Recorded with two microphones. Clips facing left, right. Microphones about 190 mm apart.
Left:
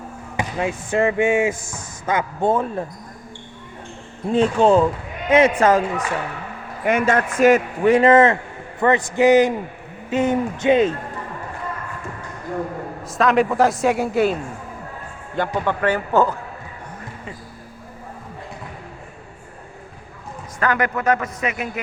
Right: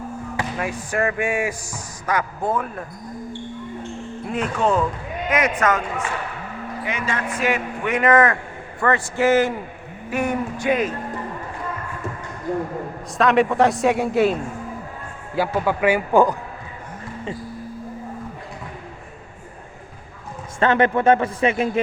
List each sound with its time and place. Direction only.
0.3 s speech: 25° left (ahead or behind)
4.3 s speech: 30° left (ahead or behind)
6.8 s a man's voice: 50° left (ahead or behind); by 10.9 s 25° left (ahead or behind)
13.1 s a man's voice: centre (ahead or behind)
15.4 s speech: 5° right (ahead or behind)
20.6 s a man's voice: 25° right (ahead or behind)